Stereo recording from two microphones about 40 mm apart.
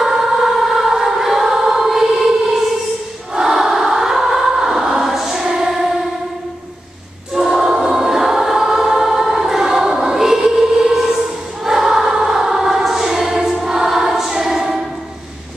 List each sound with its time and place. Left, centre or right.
0.0 s choir: centre
7.3 s choir: centre